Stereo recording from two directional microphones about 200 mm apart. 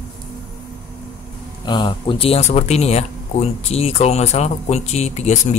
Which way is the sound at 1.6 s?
20° left (ahead or behind).